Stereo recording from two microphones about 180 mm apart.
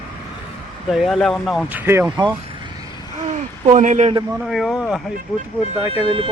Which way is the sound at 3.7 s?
40° right (ahead or behind).